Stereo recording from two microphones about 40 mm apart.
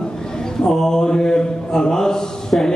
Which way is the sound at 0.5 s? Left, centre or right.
Centre.